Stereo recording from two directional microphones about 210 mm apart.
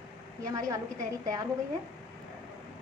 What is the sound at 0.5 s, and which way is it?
Speech, 15° right (ahead or behind).